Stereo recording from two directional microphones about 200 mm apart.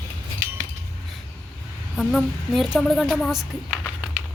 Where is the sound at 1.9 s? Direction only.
5° left (ahead or behind).